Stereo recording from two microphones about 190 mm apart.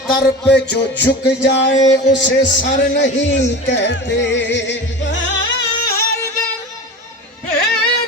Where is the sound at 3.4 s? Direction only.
65° left (ahead or behind).